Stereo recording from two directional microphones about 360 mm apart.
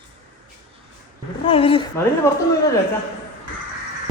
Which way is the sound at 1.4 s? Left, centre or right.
Centre.